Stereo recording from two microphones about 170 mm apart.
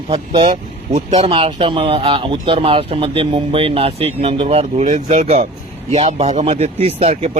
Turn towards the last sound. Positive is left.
turn(degrees=-40)  # may be behind; listen again after turning